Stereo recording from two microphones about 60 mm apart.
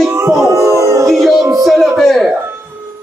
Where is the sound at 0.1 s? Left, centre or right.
Right.